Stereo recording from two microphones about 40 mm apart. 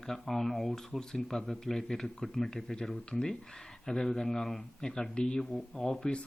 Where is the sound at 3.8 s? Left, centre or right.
Centre.